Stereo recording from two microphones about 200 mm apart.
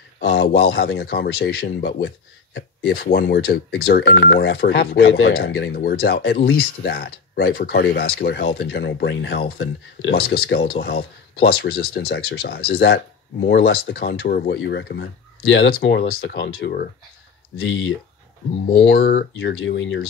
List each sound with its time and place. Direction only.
0.2 s speech: 50° left (ahead or behind)
18.7 s speech: 50° left (ahead or behind)